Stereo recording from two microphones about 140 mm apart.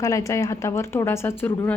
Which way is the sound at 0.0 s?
25° left (ahead or behind).